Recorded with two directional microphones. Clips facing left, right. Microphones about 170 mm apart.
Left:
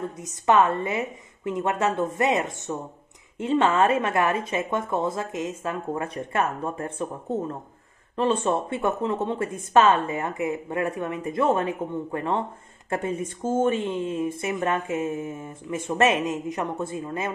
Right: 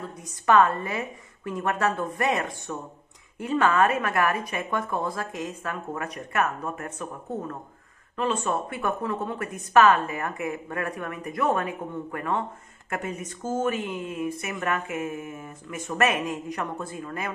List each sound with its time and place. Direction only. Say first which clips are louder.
0.0 s speech: left 3 dB; 20° left (ahead or behind)